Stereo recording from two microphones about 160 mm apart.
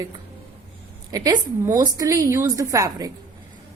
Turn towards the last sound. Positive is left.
turn(degrees=-20)  # may be behind; listen again after turning